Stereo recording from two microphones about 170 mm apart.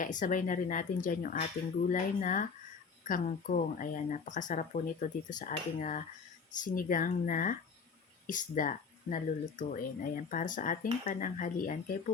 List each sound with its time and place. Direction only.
0.0 s speech: 50° left (ahead or behind)